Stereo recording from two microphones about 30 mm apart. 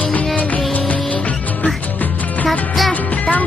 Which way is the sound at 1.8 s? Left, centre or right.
Left.